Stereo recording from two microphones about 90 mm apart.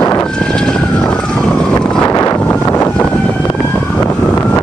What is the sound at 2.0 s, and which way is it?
Wind noise, 45° left (ahead or behind).